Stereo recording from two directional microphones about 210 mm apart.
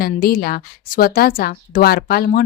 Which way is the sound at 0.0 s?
45° left (ahead or behind).